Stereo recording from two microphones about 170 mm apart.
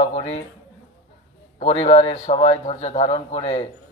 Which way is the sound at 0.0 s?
35° left (ahead or behind).